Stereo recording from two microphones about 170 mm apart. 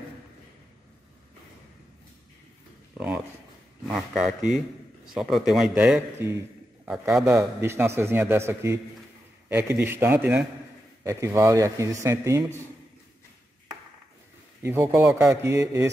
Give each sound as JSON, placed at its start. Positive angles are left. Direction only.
{"t": 3.8, "sound": "a man's voice", "side_deg": 0}
{"t": 7.2, "sound": "a man's voice", "side_deg": -15}
{"t": 14.6, "sound": "a man's voice", "side_deg": -10}